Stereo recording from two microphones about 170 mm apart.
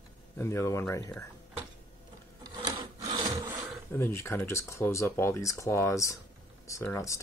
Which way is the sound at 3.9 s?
15° left (ahead or behind).